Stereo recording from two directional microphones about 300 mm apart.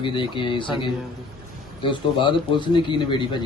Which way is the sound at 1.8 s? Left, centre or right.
Centre.